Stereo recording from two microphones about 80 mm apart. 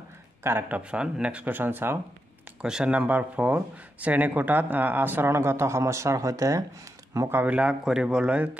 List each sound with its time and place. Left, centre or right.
0.4 s speech: right
0.7 s speech: centre
2.6 s speech: centre; by 7.2 s right
7.4 s speech: centre